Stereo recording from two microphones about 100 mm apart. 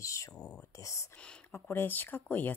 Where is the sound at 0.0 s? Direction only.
30° left (ahead or behind).